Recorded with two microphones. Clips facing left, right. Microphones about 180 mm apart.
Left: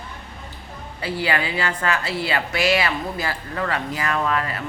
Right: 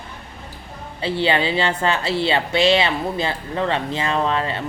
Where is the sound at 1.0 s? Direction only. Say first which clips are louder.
Right 4 dB; 25° right (ahead or behind).